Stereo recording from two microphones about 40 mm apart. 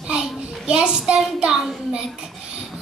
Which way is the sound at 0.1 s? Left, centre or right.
Right.